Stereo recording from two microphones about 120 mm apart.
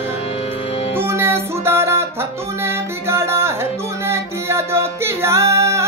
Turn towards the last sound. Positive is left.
turn(degrees=-25)  # may be behind; listen again after turning